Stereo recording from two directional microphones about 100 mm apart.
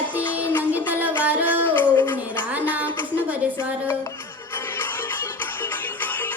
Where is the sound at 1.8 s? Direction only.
20° left (ahead or behind).